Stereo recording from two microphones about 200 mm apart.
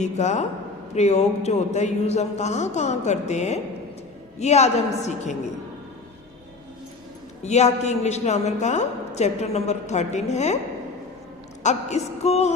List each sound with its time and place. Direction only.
0.0 s a woman's voice: 35° left (ahead or behind)
7.4 s a woman's voice: 35° left (ahead or behind)
11.6 s a woman's voice: 35° left (ahead or behind)